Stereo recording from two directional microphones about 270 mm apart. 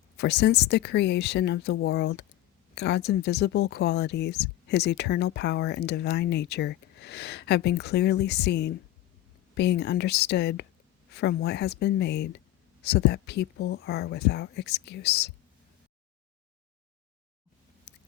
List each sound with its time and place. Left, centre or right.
0.2 s speech: left
17.9 s chewing: left